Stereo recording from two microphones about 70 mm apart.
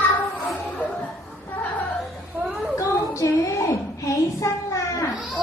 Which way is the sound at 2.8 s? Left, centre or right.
Left.